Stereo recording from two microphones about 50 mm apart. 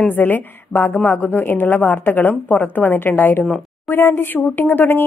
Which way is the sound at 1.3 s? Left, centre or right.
Left.